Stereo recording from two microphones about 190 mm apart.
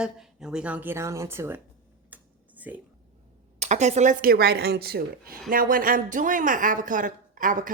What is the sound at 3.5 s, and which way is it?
Speech, 40° right (ahead or behind).